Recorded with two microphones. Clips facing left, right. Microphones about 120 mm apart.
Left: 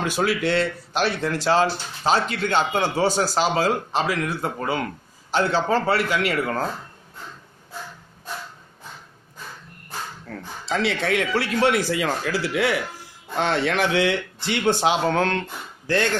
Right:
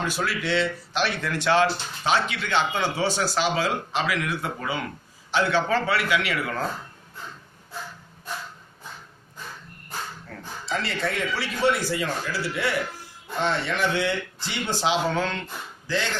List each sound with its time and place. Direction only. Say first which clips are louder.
0.0 s speech: left 5 dB; 60° left (ahead or behind)
1.2 s speech: even; 35° left (ahead or behind)
10.7 s speech: left 5 dB; 90° left; by 15.4 s 55° left (ahead or behind)